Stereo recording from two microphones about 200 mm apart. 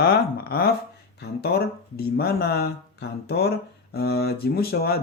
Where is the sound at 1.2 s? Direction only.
55° left (ahead or behind).